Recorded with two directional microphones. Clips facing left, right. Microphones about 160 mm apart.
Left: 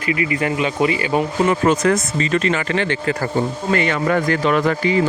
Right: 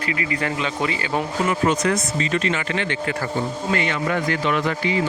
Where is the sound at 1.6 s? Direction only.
50° left (ahead or behind).